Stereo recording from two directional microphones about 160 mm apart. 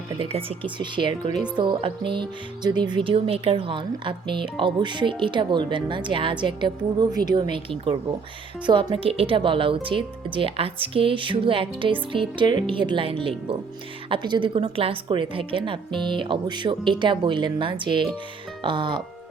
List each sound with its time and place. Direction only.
0.2 s a woman's voice: 35° right (ahead or behind)